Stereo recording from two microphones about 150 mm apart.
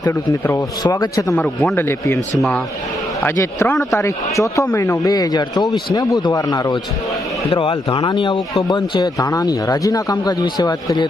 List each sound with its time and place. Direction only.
0.0 s speech: 20° left (ahead or behind)
1.4 s a man's voice: 15° left (ahead or behind)
3.2 s speech: 20° left (ahead or behind)
7.5 s speech: 35° left (ahead or behind)